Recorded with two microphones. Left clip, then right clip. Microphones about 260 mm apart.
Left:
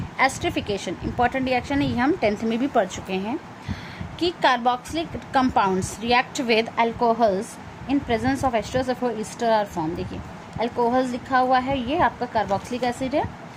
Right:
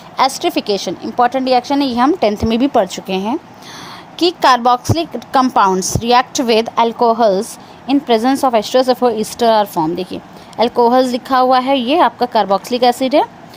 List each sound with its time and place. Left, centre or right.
0.2 s a woman's voice: right